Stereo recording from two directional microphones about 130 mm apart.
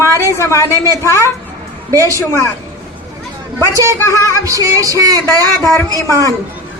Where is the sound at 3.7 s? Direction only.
25° right (ahead or behind).